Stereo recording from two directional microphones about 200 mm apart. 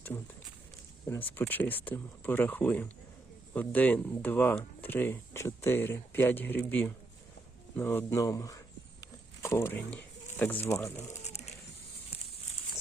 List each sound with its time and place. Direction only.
1.0 s speech: 10° left (ahead or behind)
7.8 s a sound: 10° left (ahead or behind)
10.3 s speech: 10° left (ahead or behind)
11.2 s bird: 35° left (ahead or behind)